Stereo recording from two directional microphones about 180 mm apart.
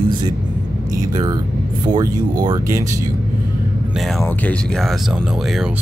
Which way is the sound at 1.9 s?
20° right (ahead or behind).